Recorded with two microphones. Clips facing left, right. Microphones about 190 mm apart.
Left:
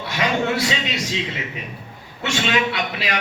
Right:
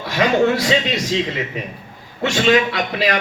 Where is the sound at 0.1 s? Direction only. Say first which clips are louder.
Right 6 dB; 40° right (ahead or behind).